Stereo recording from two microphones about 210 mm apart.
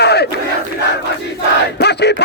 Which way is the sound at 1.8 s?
50° left (ahead or behind).